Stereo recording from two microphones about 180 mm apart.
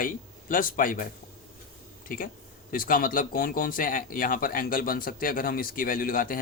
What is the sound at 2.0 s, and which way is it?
Speech, 50° left (ahead or behind).